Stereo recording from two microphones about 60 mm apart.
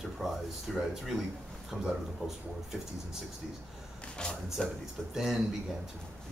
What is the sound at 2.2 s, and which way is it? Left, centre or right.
Speech, right.